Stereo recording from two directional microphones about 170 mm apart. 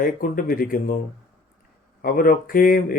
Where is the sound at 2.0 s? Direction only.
55° left (ahead or behind).